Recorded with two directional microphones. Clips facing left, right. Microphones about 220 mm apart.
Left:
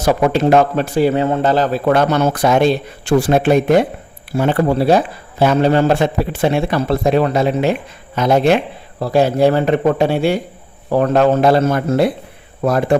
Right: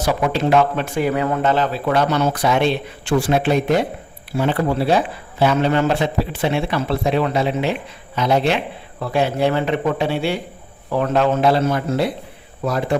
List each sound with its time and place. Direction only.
0.0 s speech: 45° left (ahead or behind)